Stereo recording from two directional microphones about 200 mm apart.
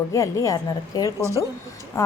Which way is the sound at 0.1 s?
15° left (ahead or behind).